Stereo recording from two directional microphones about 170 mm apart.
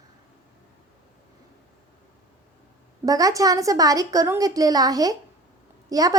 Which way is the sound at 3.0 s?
20° right (ahead or behind).